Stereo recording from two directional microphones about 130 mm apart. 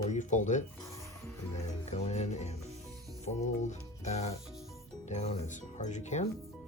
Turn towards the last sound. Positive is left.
turn(degrees=60)  # may be behind; listen again after turning